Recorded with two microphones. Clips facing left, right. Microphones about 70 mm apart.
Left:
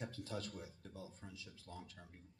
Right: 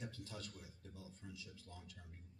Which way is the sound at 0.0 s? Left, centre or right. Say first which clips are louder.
Left 5 dB; left.